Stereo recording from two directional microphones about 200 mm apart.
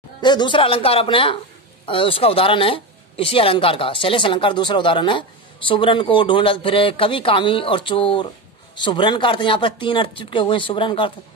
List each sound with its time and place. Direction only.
0.2 s speech: 20° left (ahead or behind)